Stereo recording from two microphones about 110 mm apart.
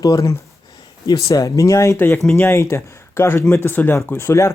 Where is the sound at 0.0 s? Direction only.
30° left (ahead or behind).